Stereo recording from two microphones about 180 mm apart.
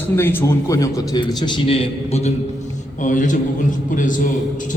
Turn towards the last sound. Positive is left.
turn(degrees=45)  # may be behind; listen again after turning